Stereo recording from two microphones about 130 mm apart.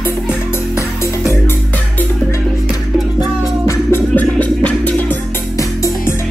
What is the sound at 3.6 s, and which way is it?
Music, 15° left (ahead or behind).